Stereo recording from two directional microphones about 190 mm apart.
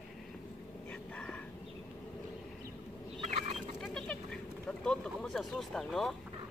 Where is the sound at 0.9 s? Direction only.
5° left (ahead or behind).